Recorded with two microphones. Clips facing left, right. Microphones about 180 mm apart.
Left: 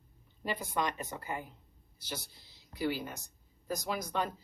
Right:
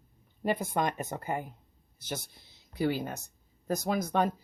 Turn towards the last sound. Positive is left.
turn(degrees=-50)  # may be behind; listen again after turning